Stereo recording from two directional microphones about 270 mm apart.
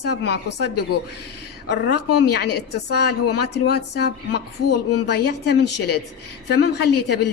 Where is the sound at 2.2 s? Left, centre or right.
Left.